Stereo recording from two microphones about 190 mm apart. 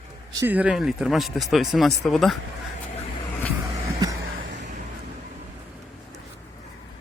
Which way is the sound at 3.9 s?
20° right (ahead or behind).